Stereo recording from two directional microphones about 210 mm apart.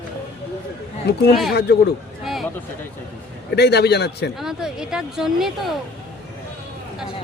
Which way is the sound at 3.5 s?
50° left (ahead or behind).